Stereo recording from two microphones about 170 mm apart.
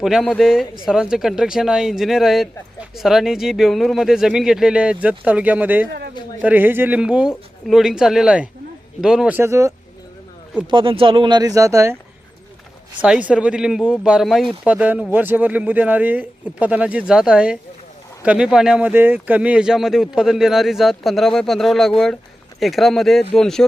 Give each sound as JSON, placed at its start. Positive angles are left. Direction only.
{"t": 0.0, "sound": "speech", "side_deg": 0}
{"t": 10.7, "sound": "speech", "side_deg": -30}
{"t": 13.0, "sound": "speech", "side_deg": -10}